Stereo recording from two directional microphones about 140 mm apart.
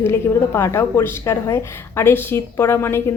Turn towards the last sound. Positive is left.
turn(degrees=15)  # may be behind; listen again after turning